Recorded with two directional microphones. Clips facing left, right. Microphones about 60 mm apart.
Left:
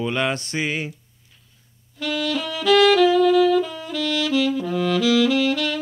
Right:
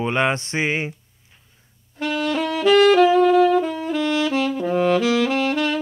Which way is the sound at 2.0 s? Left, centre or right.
Right.